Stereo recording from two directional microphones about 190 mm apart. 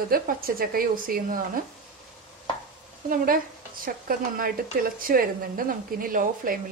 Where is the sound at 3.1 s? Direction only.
50° right (ahead or behind).